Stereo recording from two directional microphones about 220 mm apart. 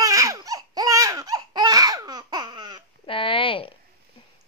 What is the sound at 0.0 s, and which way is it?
Laughter, 15° right (ahead or behind).